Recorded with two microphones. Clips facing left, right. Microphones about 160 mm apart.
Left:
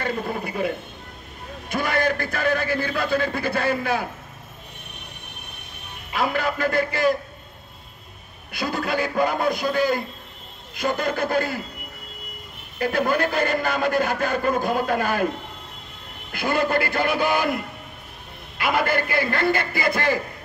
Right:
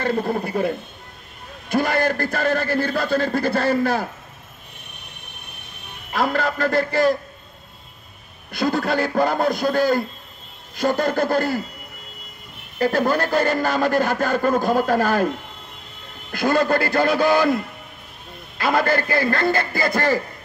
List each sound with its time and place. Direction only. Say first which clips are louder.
0.0 s a man's voice: right 5 dB; 50° right (ahead or behind)
1.7 s a man's voice: right 3 dB; 50° right (ahead or behind)
6.1 s a man's voice: right 2 dB; 45° right (ahead or behind)
8.5 s a man's voice: right 5 dB; 50° right (ahead or behind)
12.7 s a man's voice: right 3 dB; 40° right (ahead or behind)
16.3 s a man's voice: right 4 dB; 45° right (ahead or behind)
18.6 s a man's voice: right 3 dB; 40° right (ahead or behind)